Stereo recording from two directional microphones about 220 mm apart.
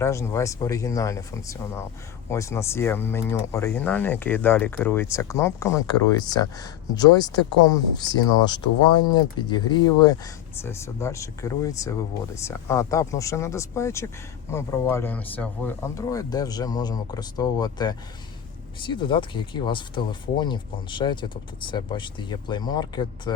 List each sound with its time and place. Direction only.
0.0 s speech: 15° left (ahead or behind)